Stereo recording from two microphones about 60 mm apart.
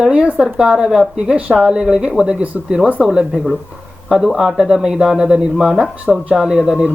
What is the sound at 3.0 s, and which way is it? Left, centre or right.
Speech, centre.